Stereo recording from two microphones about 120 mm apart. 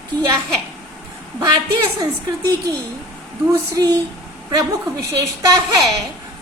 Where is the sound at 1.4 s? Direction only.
35° right (ahead or behind).